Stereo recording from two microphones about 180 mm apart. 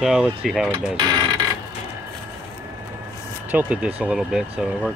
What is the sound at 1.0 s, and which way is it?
Mechanisms, 20° right (ahead or behind).